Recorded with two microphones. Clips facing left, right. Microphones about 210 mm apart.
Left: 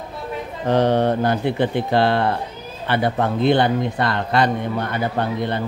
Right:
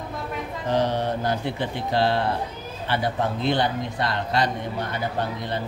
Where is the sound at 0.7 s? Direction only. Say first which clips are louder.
Left 7 dB; 60° left (ahead or behind).